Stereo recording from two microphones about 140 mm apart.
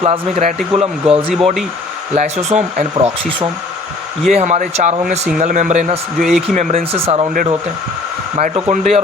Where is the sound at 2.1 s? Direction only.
55° right (ahead or behind).